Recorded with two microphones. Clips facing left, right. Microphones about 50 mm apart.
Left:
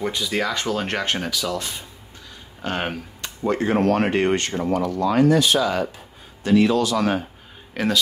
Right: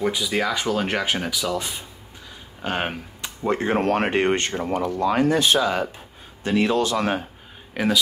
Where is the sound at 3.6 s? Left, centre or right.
Right.